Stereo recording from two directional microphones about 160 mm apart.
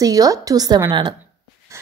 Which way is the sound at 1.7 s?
20° right (ahead or behind).